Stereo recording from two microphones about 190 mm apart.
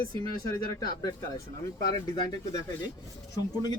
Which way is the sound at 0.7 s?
20° left (ahead or behind).